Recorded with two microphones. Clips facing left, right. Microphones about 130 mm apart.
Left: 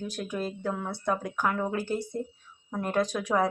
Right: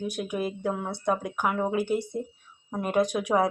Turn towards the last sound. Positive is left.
turn(degrees=-15)  # may be behind; listen again after turning